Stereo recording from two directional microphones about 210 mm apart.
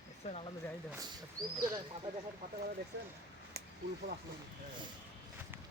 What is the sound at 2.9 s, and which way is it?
Speech, 55° right (ahead or behind).